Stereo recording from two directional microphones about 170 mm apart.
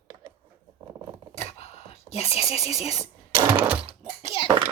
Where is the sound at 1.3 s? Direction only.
35° left (ahead or behind).